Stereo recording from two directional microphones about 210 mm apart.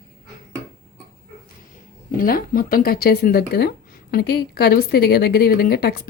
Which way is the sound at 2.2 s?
45° left (ahead or behind).